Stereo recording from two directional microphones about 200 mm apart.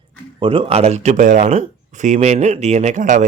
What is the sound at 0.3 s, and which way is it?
Speech, 25° right (ahead or behind).